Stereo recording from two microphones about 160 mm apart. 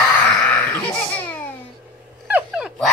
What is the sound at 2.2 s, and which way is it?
Dog, 10° right (ahead or behind).